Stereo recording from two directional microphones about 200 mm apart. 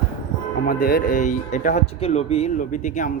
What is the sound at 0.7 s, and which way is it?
Speech, 45° left (ahead or behind).